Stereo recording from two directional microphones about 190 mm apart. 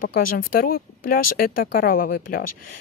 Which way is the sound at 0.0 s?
50° left (ahead or behind).